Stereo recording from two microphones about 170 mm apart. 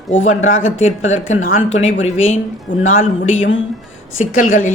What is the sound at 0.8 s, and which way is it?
Speech, 45° left (ahead or behind).